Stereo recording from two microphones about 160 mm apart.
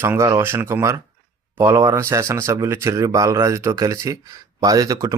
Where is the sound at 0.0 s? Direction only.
15° right (ahead or behind).